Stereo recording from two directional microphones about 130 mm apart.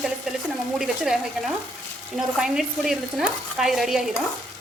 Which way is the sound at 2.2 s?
5° right (ahead or behind).